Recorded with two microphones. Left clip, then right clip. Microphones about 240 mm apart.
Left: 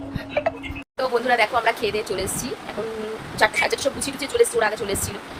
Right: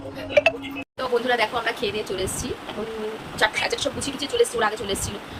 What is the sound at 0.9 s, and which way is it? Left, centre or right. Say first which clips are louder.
A woman's voice: left 2 dB; centre.